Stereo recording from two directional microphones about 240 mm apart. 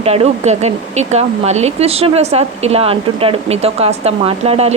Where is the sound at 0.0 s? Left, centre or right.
Right.